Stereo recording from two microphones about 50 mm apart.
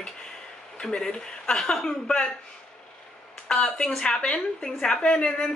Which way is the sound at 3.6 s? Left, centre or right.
Centre.